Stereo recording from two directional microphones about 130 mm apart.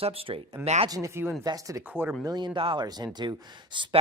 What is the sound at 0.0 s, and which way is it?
Speech, 45° right (ahead or behind).